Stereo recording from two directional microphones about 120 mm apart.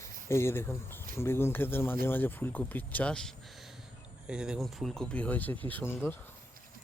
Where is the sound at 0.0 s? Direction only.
20° left (ahead or behind).